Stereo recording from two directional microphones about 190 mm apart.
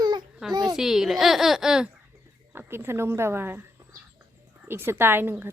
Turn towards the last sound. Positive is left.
turn(degrees=-10)  # may be behind; listen again after turning